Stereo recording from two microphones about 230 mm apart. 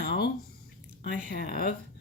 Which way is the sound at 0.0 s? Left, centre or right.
Left.